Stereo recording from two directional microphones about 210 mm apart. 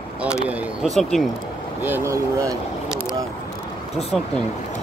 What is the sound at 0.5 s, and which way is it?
Speech, centre (ahead or behind).